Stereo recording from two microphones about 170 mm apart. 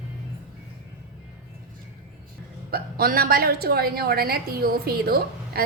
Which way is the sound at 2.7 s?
60° right (ahead or behind).